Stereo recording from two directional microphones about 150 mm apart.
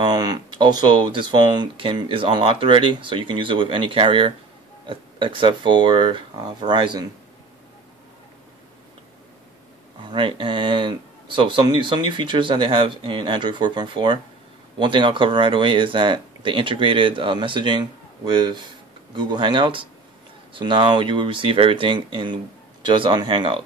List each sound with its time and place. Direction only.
0.0 s speech: 30° right (ahead or behind)
10.0 s speech: 35° right (ahead or behind)